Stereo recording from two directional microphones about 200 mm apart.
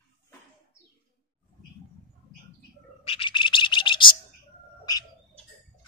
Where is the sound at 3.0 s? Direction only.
25° left (ahead or behind).